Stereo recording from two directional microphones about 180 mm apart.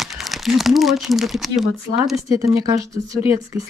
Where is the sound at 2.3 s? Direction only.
15° right (ahead or behind).